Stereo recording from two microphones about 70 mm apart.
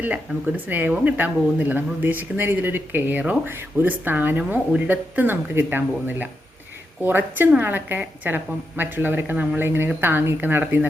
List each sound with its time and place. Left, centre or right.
0.0 s a woman's voice: right